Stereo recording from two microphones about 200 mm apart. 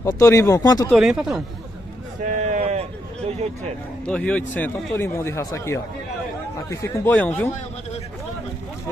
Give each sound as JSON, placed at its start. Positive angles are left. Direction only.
{"t": 0.0, "sound": "speech", "side_deg": 15}
{"t": 0.9, "sound": "speech", "side_deg": -5}
{"t": 2.2, "sound": "a sound", "side_deg": -40}
{"t": 4.1, "sound": "speech", "side_deg": 5}